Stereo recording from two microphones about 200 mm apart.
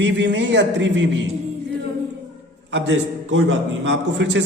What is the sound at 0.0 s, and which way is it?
A man's voice, 60° right (ahead or behind).